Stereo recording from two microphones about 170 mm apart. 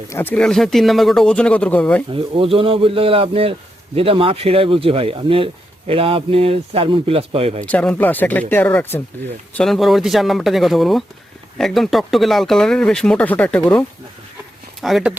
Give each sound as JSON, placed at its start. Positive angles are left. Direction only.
{"t": 0.1, "sound": "speech", "side_deg": 10}
{"t": 2.1, "sound": "a man's voice", "side_deg": -30}
{"t": 7.6, "sound": "speech", "side_deg": 10}
{"t": 9.6, "sound": "speech", "side_deg": 0}